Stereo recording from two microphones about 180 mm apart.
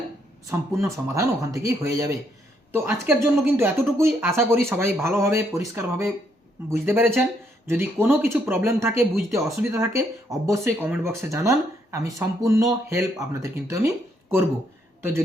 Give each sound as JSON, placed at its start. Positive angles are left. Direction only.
{"t": 0.5, "sound": "speech", "side_deg": -15}